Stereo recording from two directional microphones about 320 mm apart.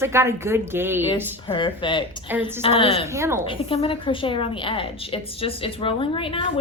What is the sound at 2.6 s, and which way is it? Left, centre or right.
Speech, centre.